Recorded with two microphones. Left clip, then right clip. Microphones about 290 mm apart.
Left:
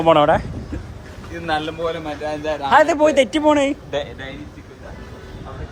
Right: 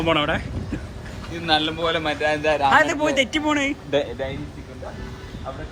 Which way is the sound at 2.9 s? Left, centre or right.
Centre.